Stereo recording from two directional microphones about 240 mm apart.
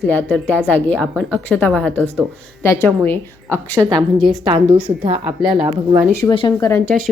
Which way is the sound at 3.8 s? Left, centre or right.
Centre.